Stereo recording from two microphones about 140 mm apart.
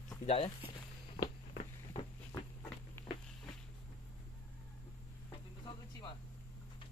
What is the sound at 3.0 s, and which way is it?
Walk, 20° left (ahead or behind).